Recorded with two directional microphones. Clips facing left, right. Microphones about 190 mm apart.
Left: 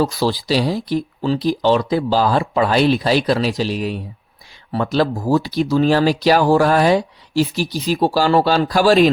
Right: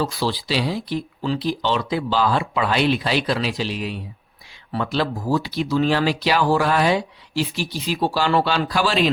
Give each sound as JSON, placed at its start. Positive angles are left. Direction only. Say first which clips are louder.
{"t": 0.0, "sound": "speech", "louder": "left 5 dB", "side_deg": 40}